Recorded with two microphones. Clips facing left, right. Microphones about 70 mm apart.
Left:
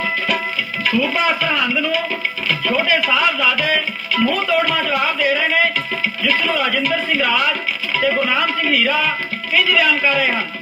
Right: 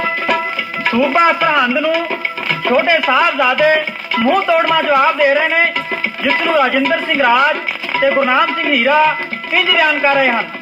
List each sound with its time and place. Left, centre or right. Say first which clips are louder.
0.9 s speech: right 6 dB; right